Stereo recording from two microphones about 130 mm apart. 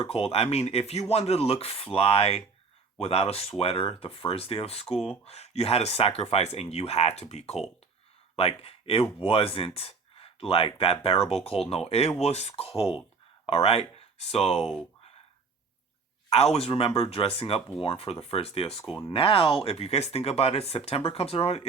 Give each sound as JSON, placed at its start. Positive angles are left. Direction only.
{"t": 0.1, "sound": "speech", "side_deg": 50}
{"t": 14.6, "sound": "speech", "side_deg": 0}
{"t": 16.3, "sound": "speech", "side_deg": 50}